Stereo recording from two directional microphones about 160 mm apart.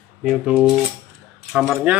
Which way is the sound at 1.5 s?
5° right (ahead or behind).